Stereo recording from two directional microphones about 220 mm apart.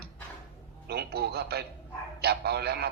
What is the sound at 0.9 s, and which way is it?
A man's voice, 45° right (ahead or behind).